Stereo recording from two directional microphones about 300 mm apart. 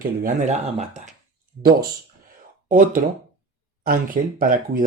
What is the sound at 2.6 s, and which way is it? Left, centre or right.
Speech, right.